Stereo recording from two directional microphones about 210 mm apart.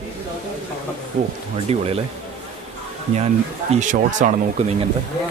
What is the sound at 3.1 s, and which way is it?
Speech, 30° right (ahead or behind).